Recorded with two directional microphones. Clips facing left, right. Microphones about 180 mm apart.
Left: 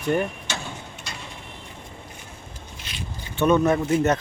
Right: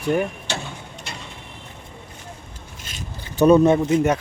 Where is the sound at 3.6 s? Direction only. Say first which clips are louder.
Right 5 dB; 25° right (ahead or behind).